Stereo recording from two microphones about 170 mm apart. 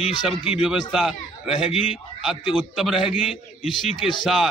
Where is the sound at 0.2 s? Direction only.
Centre (ahead or behind).